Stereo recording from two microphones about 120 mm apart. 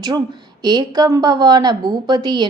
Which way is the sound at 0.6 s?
35° right (ahead or behind).